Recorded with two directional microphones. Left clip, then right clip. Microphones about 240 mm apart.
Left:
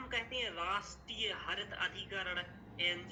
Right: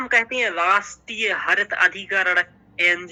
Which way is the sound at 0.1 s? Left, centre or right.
Right.